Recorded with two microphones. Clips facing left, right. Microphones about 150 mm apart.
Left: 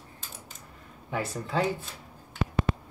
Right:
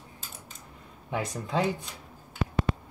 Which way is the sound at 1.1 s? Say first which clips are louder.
Even; 15° right (ahead or behind).